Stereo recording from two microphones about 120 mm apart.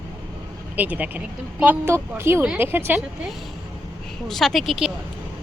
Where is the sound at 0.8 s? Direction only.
10° right (ahead or behind).